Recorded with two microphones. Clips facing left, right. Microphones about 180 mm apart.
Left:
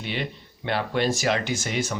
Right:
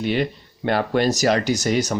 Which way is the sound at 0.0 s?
45° right (ahead or behind).